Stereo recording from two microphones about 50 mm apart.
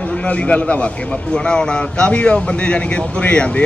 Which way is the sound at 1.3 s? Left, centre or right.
Centre.